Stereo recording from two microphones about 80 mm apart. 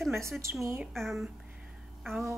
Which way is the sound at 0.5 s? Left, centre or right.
Centre.